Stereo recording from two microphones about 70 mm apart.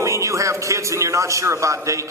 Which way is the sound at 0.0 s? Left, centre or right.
Right.